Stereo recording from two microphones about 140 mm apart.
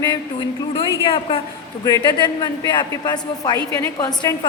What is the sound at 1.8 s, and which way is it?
A man's voice, 25° left (ahead or behind).